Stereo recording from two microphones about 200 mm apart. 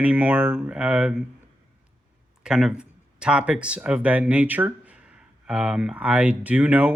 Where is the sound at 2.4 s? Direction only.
5° right (ahead or behind).